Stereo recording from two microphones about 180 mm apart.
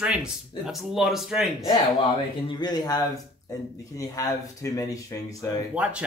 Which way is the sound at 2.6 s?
20° left (ahead or behind).